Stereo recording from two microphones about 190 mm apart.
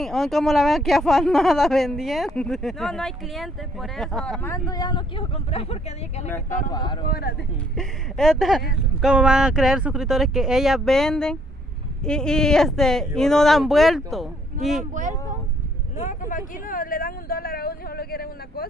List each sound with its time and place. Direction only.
0.0 s speech: centre (ahead or behind); by 6.2 s 35° left (ahead or behind)
6.7 s speech: 25° left (ahead or behind)
7.1 s speech: 55° left (ahead or behind)
7.7 s speech: centre (ahead or behind)
16.0 s vehicle: 45° left (ahead or behind)